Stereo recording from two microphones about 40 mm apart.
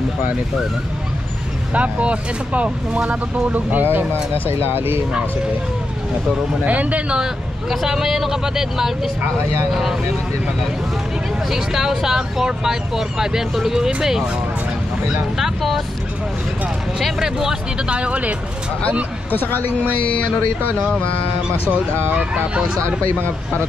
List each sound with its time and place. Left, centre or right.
1.7 s speech: right
3.8 s speech: right
6.6 s speech: right
7.7 s speech: centre
11.5 s speech: centre
15.3 s speech: centre
17.2 s speech: centre
17.8 s speech: right
19.3 s speech: left